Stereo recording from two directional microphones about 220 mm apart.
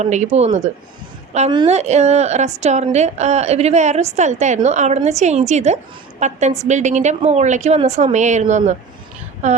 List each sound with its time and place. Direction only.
0.0 s a woman's voice: 30° right (ahead or behind)